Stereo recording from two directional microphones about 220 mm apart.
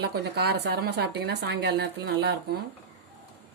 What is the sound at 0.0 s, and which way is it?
A woman's voice, 50° right (ahead or behind).